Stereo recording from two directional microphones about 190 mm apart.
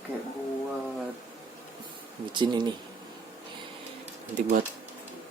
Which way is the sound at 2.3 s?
25° right (ahead or behind).